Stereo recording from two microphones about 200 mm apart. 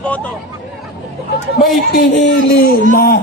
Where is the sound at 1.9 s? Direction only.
50° left (ahead or behind).